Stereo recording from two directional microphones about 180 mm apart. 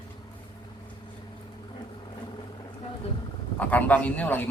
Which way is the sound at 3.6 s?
10° left (ahead or behind).